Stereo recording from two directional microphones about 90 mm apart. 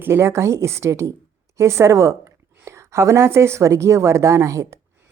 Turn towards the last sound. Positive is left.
turn(degrees=-35)  # may be behind; listen again after turning